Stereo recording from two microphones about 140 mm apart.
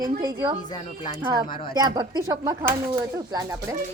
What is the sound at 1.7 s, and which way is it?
Speech, 25° right (ahead or behind).